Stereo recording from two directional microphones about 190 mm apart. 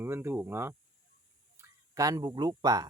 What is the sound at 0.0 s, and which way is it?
Speech, 10° right (ahead or behind).